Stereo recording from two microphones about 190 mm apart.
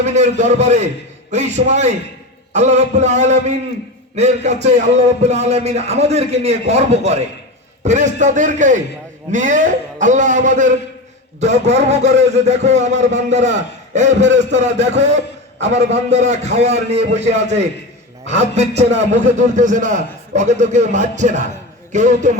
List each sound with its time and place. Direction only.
0.0 s a man's voice: 35° right (ahead or behind)
18.3 s a man's voice: 35° right (ahead or behind)